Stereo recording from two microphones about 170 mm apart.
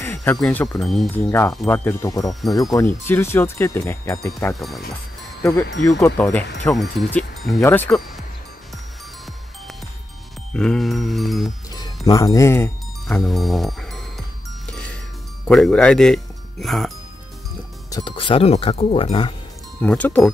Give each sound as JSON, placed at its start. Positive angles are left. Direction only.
{"t": 0.0, "sound": "speech", "side_deg": 10}
{"t": 1.1, "sound": "speech", "side_deg": 15}
{"t": 4.6, "sound": "speech", "side_deg": 0}
{"t": 5.9, "sound": "speech", "side_deg": 20}
{"t": 6.6, "sound": "speech", "side_deg": 5}
{"t": 10.5, "sound": "speech", "side_deg": 5}
{"t": 11.7, "sound": "speech", "side_deg": 20}
{"t": 13.0, "sound": "music", "side_deg": 0}
{"t": 15.4, "sound": "speech", "side_deg": 5}
{"t": 17.9, "sound": "speech", "side_deg": 30}
{"t": 19.8, "sound": "speech", "side_deg": 10}